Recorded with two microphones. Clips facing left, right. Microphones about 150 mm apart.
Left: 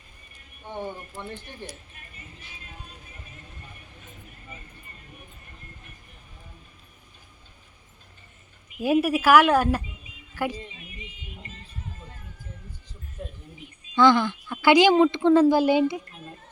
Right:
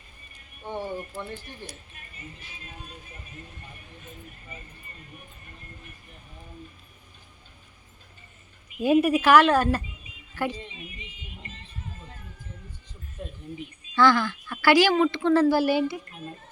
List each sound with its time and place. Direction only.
8.8 s a woman's voice: 5° left (ahead or behind)
13.9 s a woman's voice: 20° left (ahead or behind)